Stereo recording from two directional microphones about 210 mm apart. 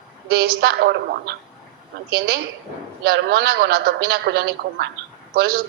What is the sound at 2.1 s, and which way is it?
A woman's voice, 50° right (ahead or behind).